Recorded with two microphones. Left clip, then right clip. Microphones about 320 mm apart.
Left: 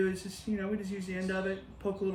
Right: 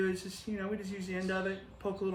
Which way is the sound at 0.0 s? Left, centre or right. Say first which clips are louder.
Left 2 dB; centre.